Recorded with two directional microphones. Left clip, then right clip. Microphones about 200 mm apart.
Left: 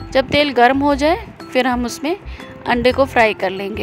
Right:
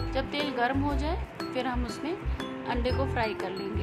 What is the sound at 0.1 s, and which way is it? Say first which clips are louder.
A woman's voice: left 17 dB; 50° left (ahead or behind).